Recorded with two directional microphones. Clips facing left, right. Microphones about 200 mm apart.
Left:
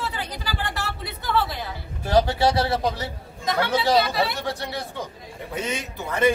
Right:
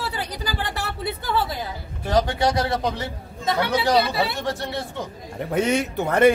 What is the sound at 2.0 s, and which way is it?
Speech, 5° left (ahead or behind).